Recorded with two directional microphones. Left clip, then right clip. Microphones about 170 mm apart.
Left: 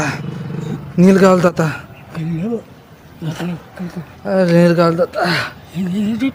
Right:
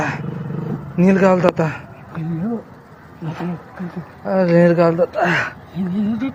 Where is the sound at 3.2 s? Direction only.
45° left (ahead or behind); by 5.5 s 30° left (ahead or behind).